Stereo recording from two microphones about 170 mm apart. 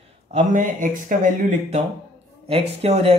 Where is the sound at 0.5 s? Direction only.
50° right (ahead or behind).